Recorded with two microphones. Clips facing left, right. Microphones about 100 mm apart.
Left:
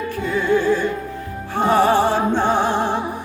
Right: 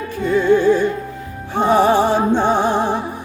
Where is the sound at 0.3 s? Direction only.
20° right (ahead or behind).